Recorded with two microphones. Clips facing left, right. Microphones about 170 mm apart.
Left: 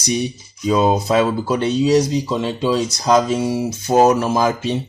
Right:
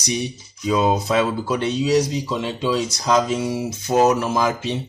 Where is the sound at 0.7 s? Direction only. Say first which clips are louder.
Left 3 dB; 35° left (ahead or behind).